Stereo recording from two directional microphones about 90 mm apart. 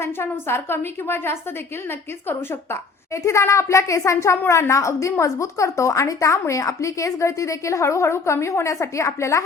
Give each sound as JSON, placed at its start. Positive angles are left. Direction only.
{"t": 0.0, "sound": "a woman's voice", "side_deg": 25}
{"t": 3.2, "sound": "a woman's voice", "side_deg": 35}